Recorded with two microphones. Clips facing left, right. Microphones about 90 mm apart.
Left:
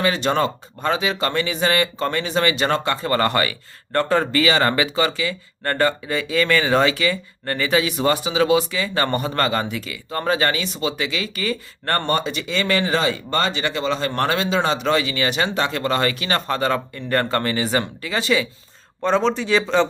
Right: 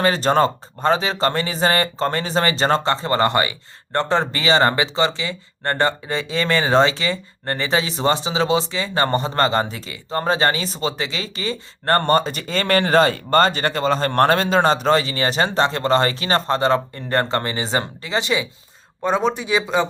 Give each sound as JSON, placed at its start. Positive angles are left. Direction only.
{"t": 0.0, "sound": "a man's voice", "side_deg": -40}